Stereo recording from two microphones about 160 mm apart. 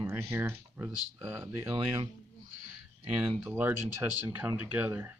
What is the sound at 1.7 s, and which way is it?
Speech, 30° right (ahead or behind).